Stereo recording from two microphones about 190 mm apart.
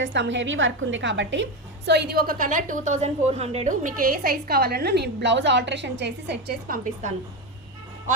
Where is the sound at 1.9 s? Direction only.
55° right (ahead or behind).